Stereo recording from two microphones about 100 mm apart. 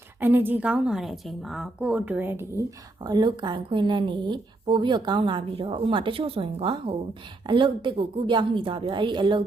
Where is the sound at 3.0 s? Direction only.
45° right (ahead or behind); by 6.9 s 65° right (ahead or behind).